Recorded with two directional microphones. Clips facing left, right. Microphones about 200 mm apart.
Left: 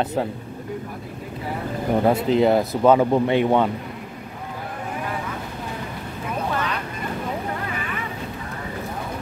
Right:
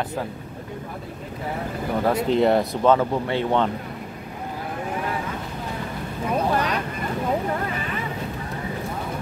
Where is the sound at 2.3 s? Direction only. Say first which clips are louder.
Right 1 dB; centre (ahead or behind).